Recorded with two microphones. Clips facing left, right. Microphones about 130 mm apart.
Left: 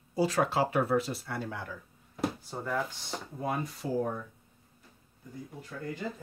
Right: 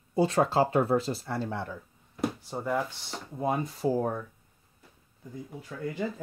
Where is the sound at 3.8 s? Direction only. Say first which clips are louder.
Right 6 dB; 30° right (ahead or behind).